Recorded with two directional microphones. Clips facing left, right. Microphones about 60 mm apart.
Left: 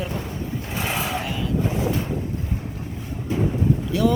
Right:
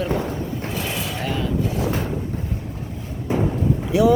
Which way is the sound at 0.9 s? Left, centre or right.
Left.